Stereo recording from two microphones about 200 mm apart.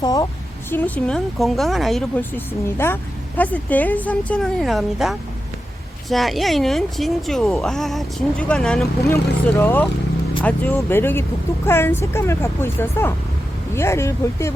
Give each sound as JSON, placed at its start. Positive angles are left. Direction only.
{"t": 0.0, "sound": "a woman's voice", "side_deg": 20}
{"t": 0.7, "sound": "speech", "side_deg": 10}